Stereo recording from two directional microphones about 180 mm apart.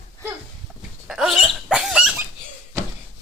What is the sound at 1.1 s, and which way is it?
Dog, centre (ahead or behind).